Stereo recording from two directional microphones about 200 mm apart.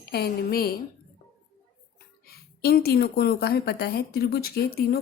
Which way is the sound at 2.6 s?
50° left (ahead or behind).